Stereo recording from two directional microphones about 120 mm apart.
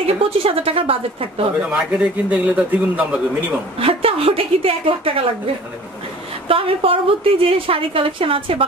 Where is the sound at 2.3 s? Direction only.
15° right (ahead or behind).